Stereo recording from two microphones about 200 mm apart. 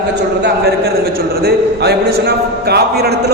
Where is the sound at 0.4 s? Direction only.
50° right (ahead or behind).